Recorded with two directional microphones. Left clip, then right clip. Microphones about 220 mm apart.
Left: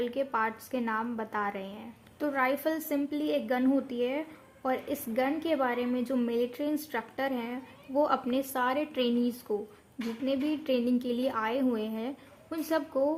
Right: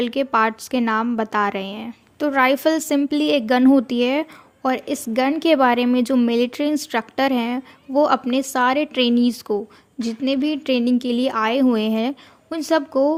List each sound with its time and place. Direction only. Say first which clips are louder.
0.0 s a woman's voice: right 11 dB; 40° right (ahead or behind)